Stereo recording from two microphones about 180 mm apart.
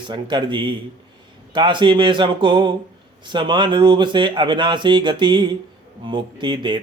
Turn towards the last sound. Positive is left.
turn(degrees=-25)  # may be behind; listen again after turning